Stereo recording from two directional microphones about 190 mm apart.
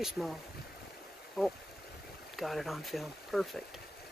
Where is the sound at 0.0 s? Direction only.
Centre (ahead or behind).